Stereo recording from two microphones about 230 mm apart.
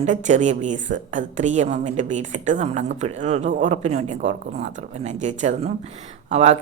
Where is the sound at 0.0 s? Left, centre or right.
Right.